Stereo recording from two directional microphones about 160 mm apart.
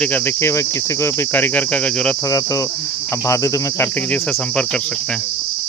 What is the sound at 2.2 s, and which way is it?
Speech, 20° left (ahead or behind).